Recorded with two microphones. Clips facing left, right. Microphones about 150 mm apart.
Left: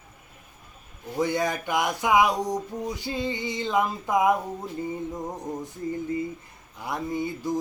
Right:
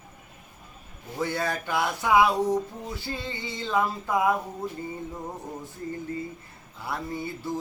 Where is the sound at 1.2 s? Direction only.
15° left (ahead or behind).